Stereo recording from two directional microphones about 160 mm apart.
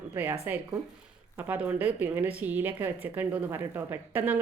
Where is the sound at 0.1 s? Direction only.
10° right (ahead or behind).